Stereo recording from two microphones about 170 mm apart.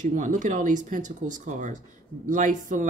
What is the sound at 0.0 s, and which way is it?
Speech, 50° right (ahead or behind).